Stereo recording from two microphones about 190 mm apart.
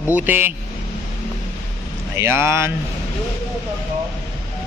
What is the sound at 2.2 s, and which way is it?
Speech, 15° right (ahead or behind).